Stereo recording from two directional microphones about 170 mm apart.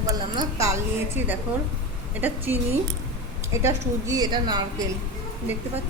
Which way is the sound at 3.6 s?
20° right (ahead or behind).